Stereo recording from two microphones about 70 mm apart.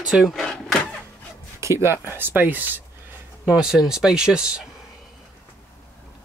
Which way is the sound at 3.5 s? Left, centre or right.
Centre.